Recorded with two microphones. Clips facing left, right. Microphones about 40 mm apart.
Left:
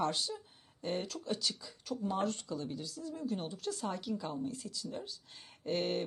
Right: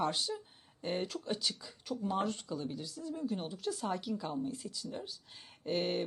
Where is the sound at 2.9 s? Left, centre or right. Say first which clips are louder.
Right 1 dB; centre.